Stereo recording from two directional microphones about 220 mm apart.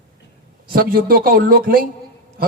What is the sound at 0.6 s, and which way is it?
Speech, 40° right (ahead or behind).